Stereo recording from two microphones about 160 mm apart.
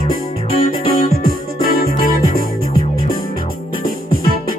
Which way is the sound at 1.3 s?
65° right (ahead or behind).